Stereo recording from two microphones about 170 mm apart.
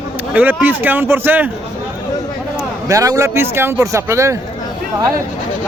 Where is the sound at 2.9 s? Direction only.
20° right (ahead or behind).